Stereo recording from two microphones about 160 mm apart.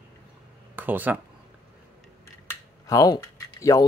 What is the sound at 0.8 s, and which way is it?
Speech, 10° right (ahead or behind).